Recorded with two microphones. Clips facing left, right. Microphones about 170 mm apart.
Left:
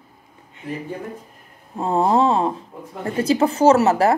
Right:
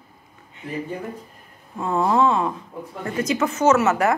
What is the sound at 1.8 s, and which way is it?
A woman's voice, 35° left (ahead or behind).